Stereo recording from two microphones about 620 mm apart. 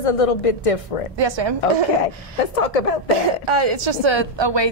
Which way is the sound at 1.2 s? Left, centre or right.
Right.